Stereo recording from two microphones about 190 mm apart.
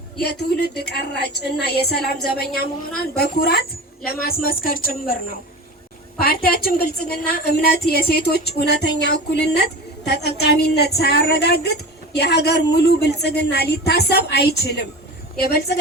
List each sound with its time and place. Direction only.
0.2 s a woman's voice: 60° left (ahead or behind)